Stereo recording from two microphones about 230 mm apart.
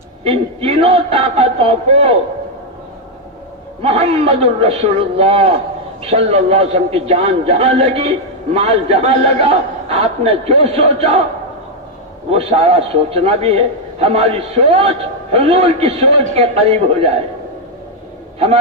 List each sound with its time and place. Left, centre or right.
0.2 s a man's voice: right
3.8 s a man's voice: right
12.3 s a man's voice: right